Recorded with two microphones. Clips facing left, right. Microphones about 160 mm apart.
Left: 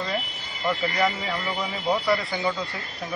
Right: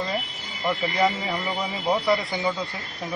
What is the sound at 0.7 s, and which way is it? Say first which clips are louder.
Speech: right 1 dB; 20° right (ahead or behind).